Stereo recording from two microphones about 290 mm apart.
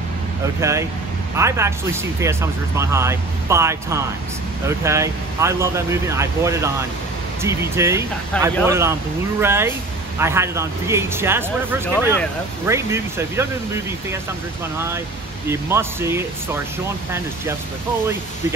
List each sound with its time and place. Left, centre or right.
0.6 s speech: centre
8.3 s speech: centre
8.6 s speech: centre
15.4 s speech: centre